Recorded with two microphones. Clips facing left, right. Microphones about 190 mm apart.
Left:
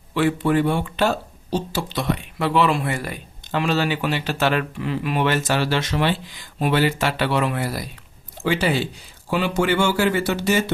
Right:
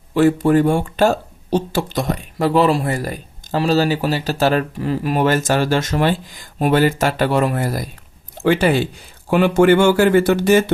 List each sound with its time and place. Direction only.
0.1 s speech: 40° right (ahead or behind)